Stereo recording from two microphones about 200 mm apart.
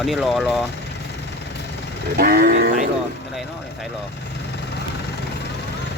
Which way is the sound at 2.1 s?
50° right (ahead or behind).